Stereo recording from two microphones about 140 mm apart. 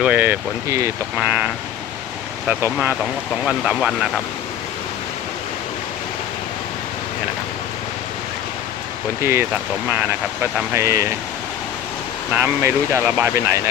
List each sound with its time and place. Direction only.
0.0 s speech: 10° right (ahead or behind)
0.7 s speech: 20° right (ahead or behind)
1.1 s speech: 10° right (ahead or behind)
2.5 s speech: 20° right (ahead or behind)
3.4 s speech: 5° right (ahead or behind)
9.2 s speech: 20° right (ahead or behind)
12.3 s speech: 15° right (ahead or behind)